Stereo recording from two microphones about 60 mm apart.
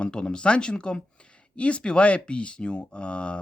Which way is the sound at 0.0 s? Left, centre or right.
Centre.